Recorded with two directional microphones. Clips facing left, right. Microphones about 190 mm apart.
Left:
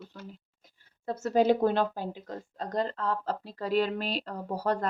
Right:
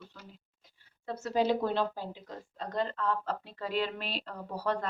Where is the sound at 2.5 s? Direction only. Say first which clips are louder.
Left 2 dB; 40° left (ahead or behind).